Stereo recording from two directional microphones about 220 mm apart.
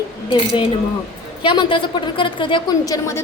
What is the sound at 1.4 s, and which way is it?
A woman's voice, 20° left (ahead or behind).